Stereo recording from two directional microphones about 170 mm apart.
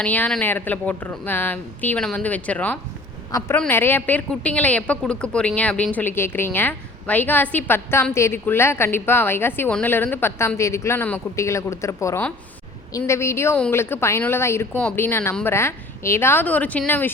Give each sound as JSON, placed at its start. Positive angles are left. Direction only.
{"t": 0.0, "sound": "a woman's voice", "side_deg": 10}